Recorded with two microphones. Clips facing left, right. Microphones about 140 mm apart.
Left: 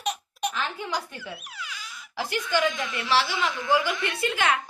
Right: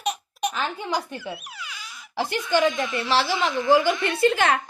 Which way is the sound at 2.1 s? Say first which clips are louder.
Right 4 dB; 30° right (ahead or behind).